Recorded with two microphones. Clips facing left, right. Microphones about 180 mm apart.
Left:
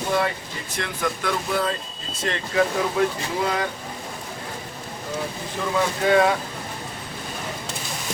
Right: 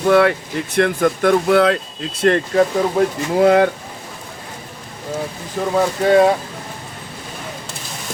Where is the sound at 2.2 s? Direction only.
60° right (ahead or behind).